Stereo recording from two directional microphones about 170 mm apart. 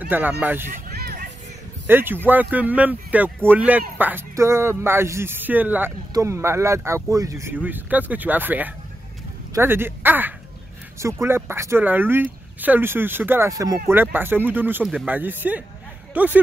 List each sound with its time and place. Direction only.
0.1 s a man's voice: 10° right (ahead or behind)
0.9 s music: 60° right (ahead or behind)
1.9 s a man's voice: 10° right (ahead or behind)